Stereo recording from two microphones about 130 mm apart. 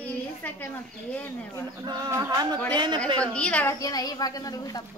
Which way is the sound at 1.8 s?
30° right (ahead or behind).